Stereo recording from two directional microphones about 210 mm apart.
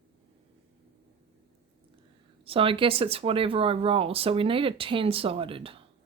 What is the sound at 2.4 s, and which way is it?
Speech, 25° right (ahead or behind).